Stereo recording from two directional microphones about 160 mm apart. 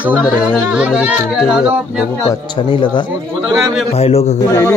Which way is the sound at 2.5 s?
30° left (ahead or behind).